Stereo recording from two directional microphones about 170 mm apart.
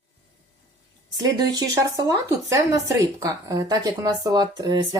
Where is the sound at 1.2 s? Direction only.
25° right (ahead or behind).